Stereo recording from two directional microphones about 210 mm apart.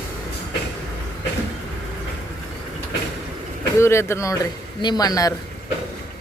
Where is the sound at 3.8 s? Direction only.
10° left (ahead or behind).